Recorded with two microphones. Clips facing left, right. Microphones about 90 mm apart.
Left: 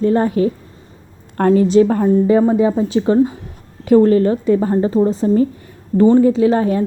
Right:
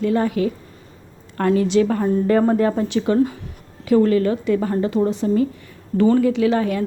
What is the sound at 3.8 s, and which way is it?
A woman's voice, 40° left (ahead or behind).